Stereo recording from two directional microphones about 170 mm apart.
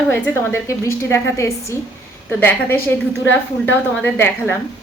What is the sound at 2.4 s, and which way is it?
Speech, 10° left (ahead or behind).